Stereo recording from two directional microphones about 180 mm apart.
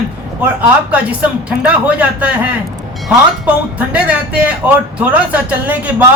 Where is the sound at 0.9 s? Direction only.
5° right (ahead or behind).